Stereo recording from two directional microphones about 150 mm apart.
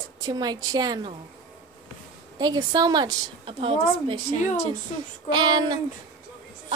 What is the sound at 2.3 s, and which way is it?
A woman's voice, 25° right (ahead or behind).